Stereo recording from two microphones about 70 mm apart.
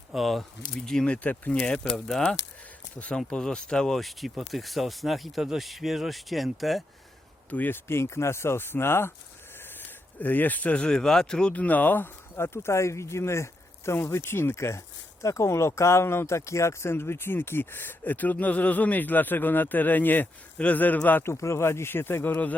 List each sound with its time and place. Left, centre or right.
0.1 s speech: centre
3.2 s speech: centre
7.5 s speech: left
10.2 s speech: left
11.5 s speech: left
21.3 s speech: left